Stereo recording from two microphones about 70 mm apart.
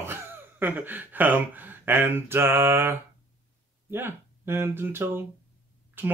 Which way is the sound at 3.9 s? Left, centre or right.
Right.